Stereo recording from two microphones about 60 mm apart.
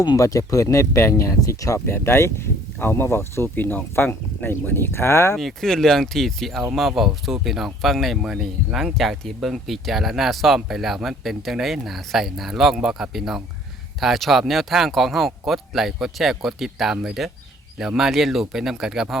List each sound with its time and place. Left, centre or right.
0.0 s speech: left
1.8 s speech: left
3.5 s speech: left
5.4 s speech: centre